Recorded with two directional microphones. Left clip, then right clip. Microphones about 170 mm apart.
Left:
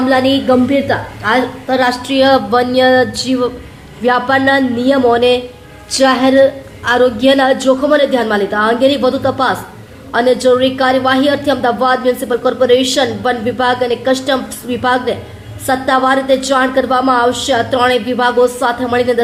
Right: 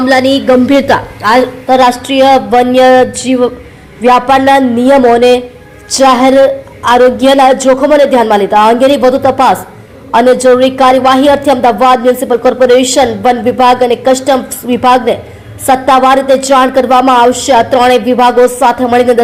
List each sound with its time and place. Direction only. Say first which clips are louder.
0.1 s a woman's voice: right 5 dB; 10° right (ahead or behind)
0.7 s a woman's voice: right 7 dB; 25° right (ahead or behind)